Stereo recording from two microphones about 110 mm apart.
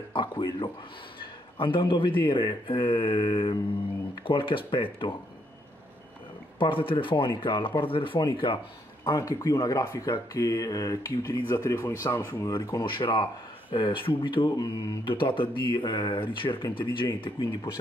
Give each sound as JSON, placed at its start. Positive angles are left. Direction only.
{"t": 0.1, "sound": "a man's voice", "side_deg": 45}
{"t": 6.6, "sound": "speech", "side_deg": 55}
{"t": 9.0, "sound": "speech", "side_deg": 35}
{"t": 12.4, "sound": "speech", "side_deg": 40}